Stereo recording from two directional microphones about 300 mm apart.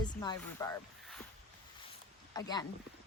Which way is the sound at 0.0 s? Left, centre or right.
Centre.